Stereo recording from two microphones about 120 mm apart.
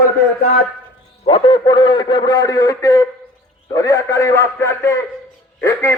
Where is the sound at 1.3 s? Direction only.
45° left (ahead or behind).